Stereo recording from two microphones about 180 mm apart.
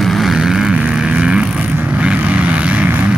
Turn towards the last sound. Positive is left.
turn(degrees=-10)  # may be behind; listen again after turning